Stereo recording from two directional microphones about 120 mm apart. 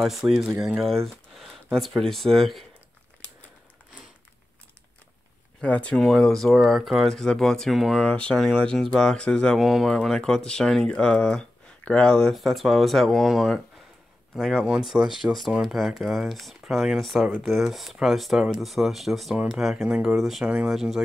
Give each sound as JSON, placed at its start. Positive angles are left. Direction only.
{"t": 0.0, "sound": "speech", "side_deg": -5}
{"t": 5.6, "sound": "speech", "side_deg": 10}